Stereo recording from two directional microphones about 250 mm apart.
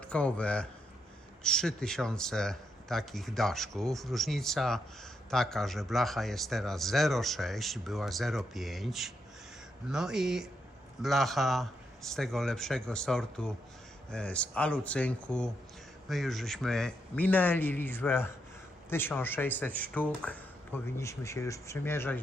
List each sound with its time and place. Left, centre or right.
0.0 s a man's voice: centre